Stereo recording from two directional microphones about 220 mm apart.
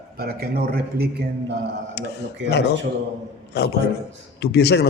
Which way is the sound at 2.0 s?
50° left (ahead or behind).